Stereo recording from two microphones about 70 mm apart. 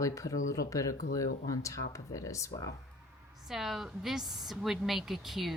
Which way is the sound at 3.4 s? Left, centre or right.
Centre.